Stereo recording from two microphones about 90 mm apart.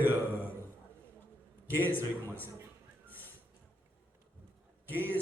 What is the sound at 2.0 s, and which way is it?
Speech, 20° left (ahead or behind).